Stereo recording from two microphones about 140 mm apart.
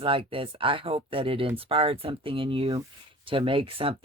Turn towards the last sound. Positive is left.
turn(degrees=-40)  # may be behind; listen again after turning